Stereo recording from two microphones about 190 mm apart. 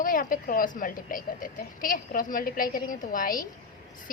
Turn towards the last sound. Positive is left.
turn(degrees=45)  # may be behind; listen again after turning